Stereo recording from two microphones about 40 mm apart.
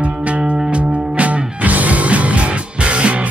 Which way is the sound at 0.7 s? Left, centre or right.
Right.